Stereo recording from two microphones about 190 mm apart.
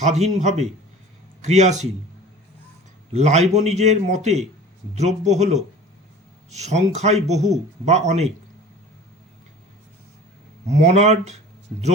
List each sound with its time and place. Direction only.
0.0 s a man's voice: 35° right (ahead or behind)
3.1 s a man's voice: 35° right (ahead or behind)
10.7 s a man's voice: 35° right (ahead or behind)